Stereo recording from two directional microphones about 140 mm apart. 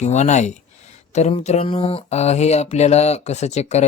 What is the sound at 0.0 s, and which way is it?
Speech, 55° left (ahead or behind).